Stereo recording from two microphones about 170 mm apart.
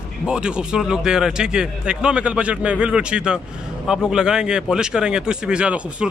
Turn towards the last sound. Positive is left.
turn(degrees=-5)  # may be behind; listen again after turning